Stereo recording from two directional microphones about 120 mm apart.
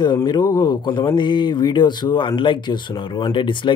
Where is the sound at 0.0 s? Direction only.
35° left (ahead or behind).